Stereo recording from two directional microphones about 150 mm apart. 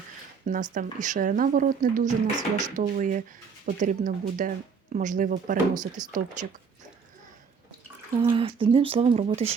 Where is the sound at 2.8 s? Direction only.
60° right (ahead or behind).